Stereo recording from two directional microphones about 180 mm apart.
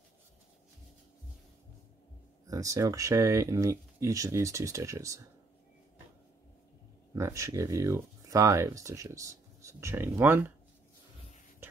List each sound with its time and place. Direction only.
2.4 s speech: 20° right (ahead or behind)
7.2 s speech: 15° right (ahead or behind)